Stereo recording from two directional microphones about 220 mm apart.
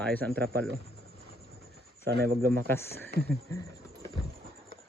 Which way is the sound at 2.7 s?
10° left (ahead or behind).